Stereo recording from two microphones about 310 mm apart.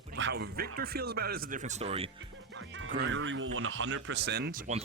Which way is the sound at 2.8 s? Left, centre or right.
Right.